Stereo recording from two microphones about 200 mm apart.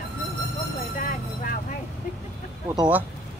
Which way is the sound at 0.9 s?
45° left (ahead or behind).